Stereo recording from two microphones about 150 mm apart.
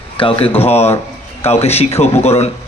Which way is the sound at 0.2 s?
35° left (ahead or behind).